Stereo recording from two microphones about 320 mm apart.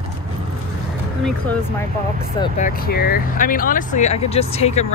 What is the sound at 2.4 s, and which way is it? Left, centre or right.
Speech, left.